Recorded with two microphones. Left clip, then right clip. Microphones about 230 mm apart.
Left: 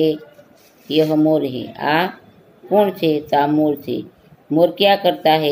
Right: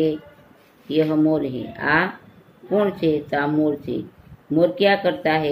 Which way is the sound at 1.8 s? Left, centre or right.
Centre.